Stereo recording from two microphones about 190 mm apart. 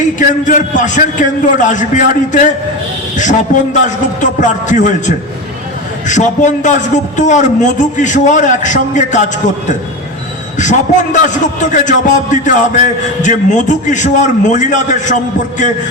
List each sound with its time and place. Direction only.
0.2 s a man's voice: 40° left (ahead or behind)
3.8 s a man's voice: 40° left (ahead or behind)
10.6 s a man's voice: 40° left (ahead or behind)